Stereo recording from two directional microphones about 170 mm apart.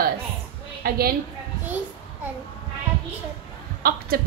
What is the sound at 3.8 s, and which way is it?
Speech, 60° right (ahead or behind).